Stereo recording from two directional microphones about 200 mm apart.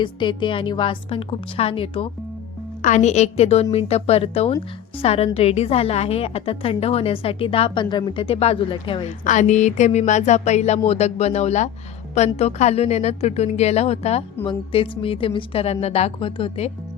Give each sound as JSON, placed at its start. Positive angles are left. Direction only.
{"t": 0.0, "sound": "a woman's voice", "side_deg": 25}
{"t": 9.0, "sound": "a woman's voice", "side_deg": 40}